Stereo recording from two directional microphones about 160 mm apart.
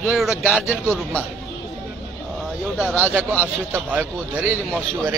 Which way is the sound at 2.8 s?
5° right (ahead or behind).